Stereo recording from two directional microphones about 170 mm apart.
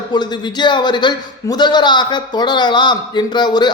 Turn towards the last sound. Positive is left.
turn(degrees=25)  # may be behind; listen again after turning